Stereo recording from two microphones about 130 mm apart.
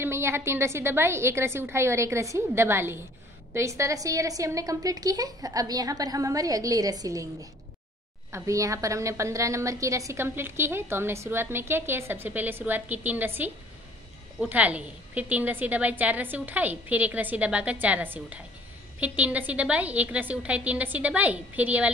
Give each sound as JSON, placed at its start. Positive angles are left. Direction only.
{"t": 0.0, "sound": "a woman's voice", "side_deg": -20}
{"t": 8.3, "sound": "a woman's voice", "side_deg": -25}